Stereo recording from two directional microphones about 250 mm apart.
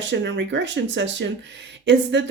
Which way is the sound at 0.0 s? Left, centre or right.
Right.